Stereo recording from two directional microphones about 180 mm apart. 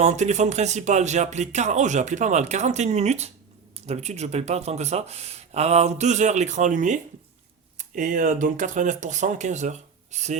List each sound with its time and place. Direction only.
0.0 s speech: 40° right (ahead or behind)